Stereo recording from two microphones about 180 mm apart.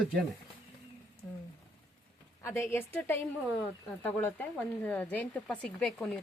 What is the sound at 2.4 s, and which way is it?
Speech, 15° left (ahead or behind).